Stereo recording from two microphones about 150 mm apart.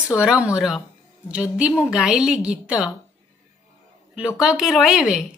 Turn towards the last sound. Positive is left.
turn(degrees=-5)  # may be behind; listen again after turning